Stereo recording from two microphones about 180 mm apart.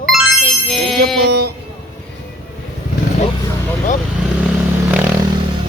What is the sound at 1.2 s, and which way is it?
Music, 65° right (ahead or behind).